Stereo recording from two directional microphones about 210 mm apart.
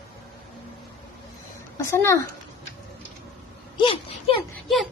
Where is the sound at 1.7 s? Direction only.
15° left (ahead or behind).